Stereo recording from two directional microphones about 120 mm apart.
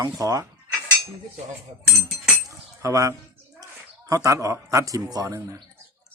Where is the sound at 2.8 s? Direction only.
25° right (ahead or behind).